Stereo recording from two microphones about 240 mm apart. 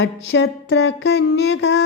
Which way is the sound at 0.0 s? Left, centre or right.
Left.